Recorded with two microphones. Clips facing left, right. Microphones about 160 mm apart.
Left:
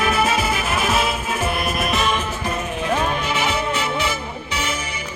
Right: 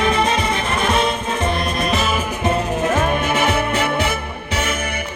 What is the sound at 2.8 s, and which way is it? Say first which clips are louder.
Music: right 3 dB; 45° right (ahead or behind).